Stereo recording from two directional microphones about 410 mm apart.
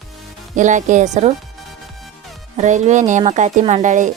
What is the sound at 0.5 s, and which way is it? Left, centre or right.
Speech, centre.